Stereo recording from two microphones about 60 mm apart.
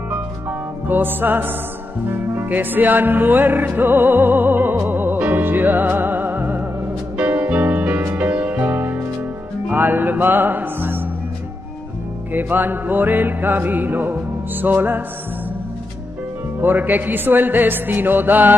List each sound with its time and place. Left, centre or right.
0.1 s music: right
12.3 s music: right
16.6 s music: right